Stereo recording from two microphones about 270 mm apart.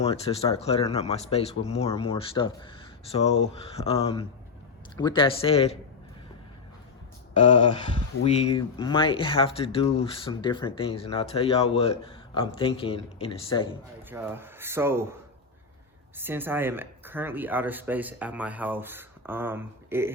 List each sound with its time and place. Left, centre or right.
0.0 s speech: left
7.8 s speech: left
14.1 s speech: centre
16.1 s speech: centre